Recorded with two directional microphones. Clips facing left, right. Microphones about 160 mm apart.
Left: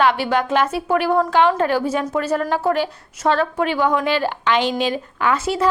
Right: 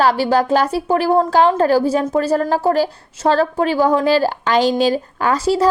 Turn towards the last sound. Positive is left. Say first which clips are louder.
# right 4 dB
turn(degrees=-35)  # may be behind; listen again after turning